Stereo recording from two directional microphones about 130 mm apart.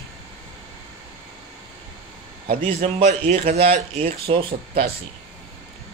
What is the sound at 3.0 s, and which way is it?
A man's voice, 60° right (ahead or behind).